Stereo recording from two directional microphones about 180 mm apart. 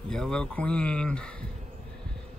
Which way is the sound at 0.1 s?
5° left (ahead or behind).